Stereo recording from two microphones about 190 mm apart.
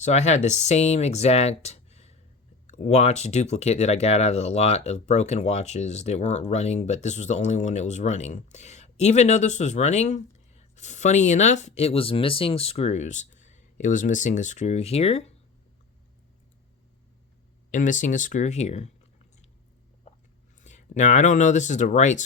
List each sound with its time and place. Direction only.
0.0 s speech: 40° left (ahead or behind)
17.7 s speech: 40° left (ahead or behind)
20.6 s speech: 40° left (ahead or behind)